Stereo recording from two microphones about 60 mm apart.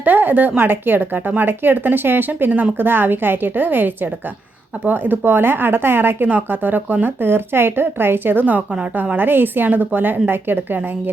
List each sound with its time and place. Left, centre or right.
0.0 s a woman's voice: right